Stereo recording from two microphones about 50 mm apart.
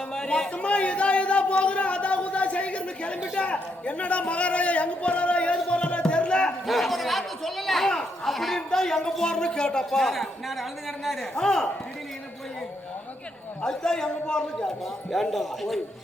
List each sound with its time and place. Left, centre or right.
0.1 s a man's voice: centre
6.7 s speech: centre
7.9 s a man's voice: centre
8.3 s a man's voice: centre
10.2 s speech: centre
11.3 s a man's voice: centre
13.7 s a man's voice: centre
15.1 s speech: centre